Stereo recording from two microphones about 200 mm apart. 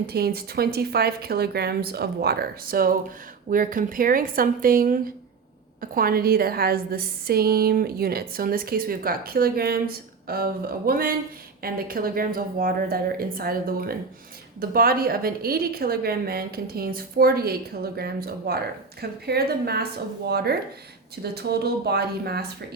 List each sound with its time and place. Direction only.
0.1 s a woman's voice: 50° right (ahead or behind)